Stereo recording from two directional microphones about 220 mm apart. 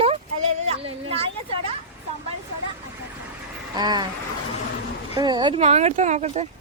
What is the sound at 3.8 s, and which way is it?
Speech, 20° right (ahead or behind).